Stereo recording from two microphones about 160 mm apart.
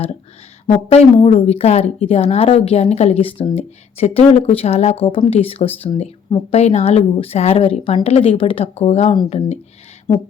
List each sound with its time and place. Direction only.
0.7 s a woman's voice: 40° left (ahead or behind)